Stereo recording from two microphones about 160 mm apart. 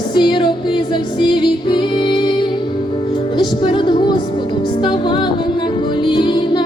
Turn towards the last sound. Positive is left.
turn(degrees=30)  # may be behind; listen again after turning